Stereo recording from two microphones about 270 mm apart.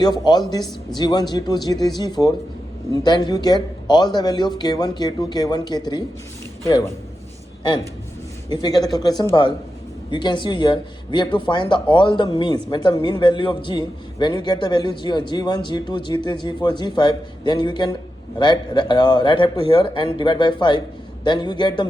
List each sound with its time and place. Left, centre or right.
0.0 s a man's voice: centre
8.4 s a man's voice: centre